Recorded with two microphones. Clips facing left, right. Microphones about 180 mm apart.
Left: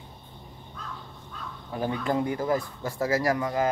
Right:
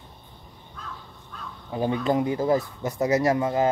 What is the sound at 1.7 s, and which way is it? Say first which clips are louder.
Speech: right 4 dB; 20° right (ahead or behind).